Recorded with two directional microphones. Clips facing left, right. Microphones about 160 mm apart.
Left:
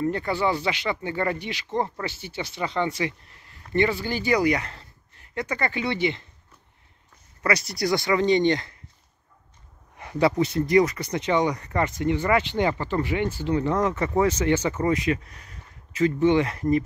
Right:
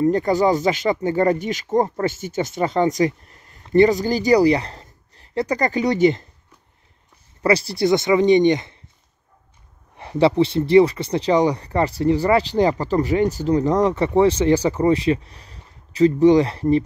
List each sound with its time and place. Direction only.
0.0 s speech: 40° right (ahead or behind)
7.4 s speech: 30° right (ahead or behind)
9.9 s speech: 30° right (ahead or behind)